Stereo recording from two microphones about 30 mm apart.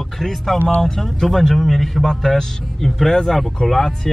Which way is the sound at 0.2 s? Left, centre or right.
Centre.